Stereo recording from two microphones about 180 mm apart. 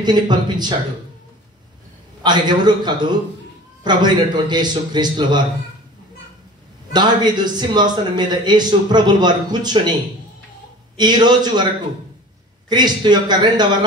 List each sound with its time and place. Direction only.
0.0 s a man's voice: 25° right (ahead or behind)
2.2 s a man's voice: 25° right (ahead or behind)
6.9 s a man's voice: 25° right (ahead or behind)
11.0 s a man's voice: 25° right (ahead or behind)
12.6 s a man's voice: 25° right (ahead or behind)